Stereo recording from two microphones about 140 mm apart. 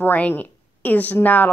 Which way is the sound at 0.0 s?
15° left (ahead or behind).